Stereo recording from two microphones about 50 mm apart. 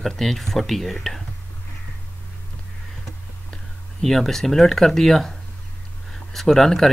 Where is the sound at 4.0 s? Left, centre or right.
Centre.